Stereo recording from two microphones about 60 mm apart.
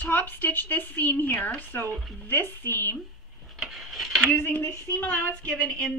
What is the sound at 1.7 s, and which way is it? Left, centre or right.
Speech, left.